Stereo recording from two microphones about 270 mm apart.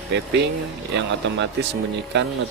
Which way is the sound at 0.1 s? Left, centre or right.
Right.